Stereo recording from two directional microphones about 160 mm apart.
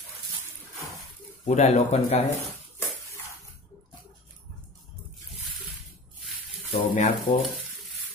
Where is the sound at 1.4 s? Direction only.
45° left (ahead or behind).